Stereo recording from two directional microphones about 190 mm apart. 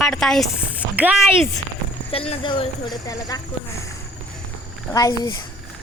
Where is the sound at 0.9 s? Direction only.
5° right (ahead or behind).